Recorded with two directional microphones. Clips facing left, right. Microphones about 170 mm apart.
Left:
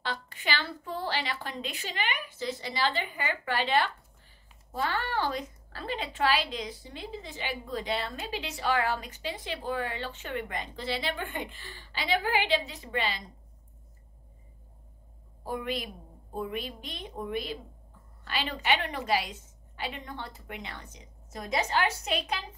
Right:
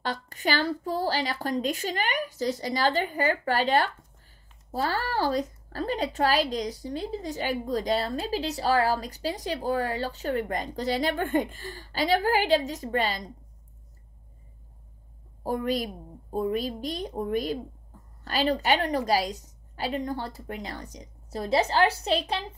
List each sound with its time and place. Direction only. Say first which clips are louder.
0.0 s a woman's voice: right 6 dB; 45° right (ahead or behind)
15.4 s a woman's voice: right 6 dB; 40° right (ahead or behind)